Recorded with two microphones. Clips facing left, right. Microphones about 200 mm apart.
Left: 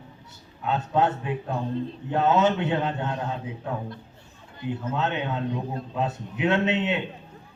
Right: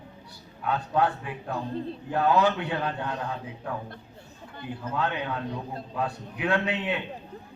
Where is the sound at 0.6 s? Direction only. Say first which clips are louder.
Left 2 dB; 25° left (ahead or behind).